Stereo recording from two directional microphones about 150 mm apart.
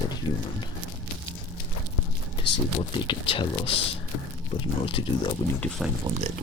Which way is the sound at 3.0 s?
35° left (ahead or behind).